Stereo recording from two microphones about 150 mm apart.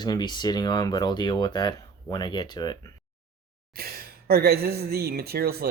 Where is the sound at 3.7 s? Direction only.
90° right.